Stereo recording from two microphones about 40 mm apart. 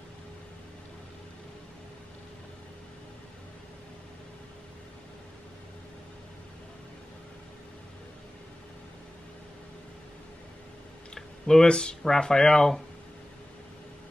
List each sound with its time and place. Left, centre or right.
11.1 s tick-tock: centre
11.6 s speech: left